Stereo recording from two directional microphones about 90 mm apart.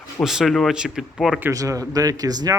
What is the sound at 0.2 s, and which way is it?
Speech, centre (ahead or behind).